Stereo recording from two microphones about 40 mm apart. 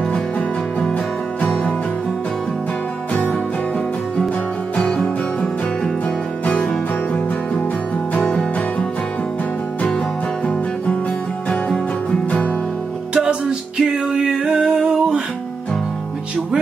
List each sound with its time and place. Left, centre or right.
0.7 s music: left
3.1 s music: left
4.7 s music: left
6.0 s music: left
10.4 s music: left
12.3 s music: left
13.1 s music: centre